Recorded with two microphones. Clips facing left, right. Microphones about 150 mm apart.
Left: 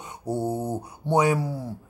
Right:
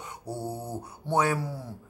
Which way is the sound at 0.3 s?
20° left (ahead or behind).